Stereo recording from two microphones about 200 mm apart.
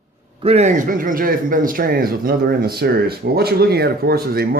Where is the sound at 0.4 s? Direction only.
35° right (ahead or behind).